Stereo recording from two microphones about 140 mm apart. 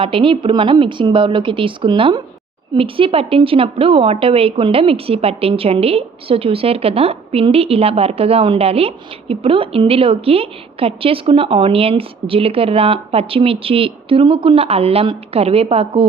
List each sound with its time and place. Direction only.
0.0 s a woman's voice: 40° right (ahead or behind)